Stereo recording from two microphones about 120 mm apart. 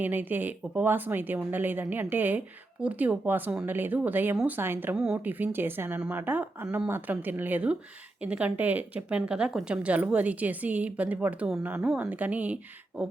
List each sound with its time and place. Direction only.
0.0 s speech: 15° right (ahead or behind)